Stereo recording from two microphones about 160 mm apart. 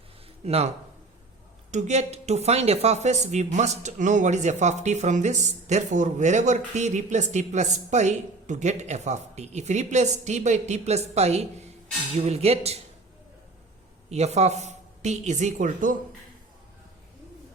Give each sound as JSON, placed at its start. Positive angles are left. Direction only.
{"t": 0.4, "sound": "speech", "side_deg": -40}
{"t": 1.7, "sound": "speech", "side_deg": -45}
{"t": 14.1, "sound": "speech", "side_deg": -40}